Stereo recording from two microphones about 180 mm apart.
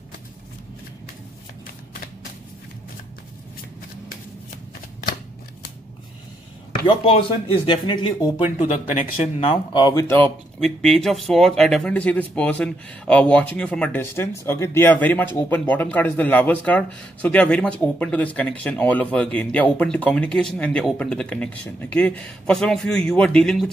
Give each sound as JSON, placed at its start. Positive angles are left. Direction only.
{"t": 6.9, "sound": "speech", "side_deg": 30}
{"t": 9.4, "sound": "speech", "side_deg": 25}
{"t": 10.0, "sound": "speech", "side_deg": 10}